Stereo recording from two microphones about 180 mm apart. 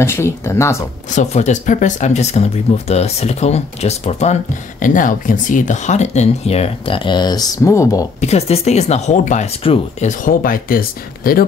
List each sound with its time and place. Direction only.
0.0 s speech: 15° left (ahead or behind)
1.1 s speech: 40° left (ahead or behind)
4.8 s speech: 45° left (ahead or behind); by 8.0 s 15° left (ahead or behind)
8.2 s speech: 35° left (ahead or behind)
10.0 s speech: 50° left (ahead or behind)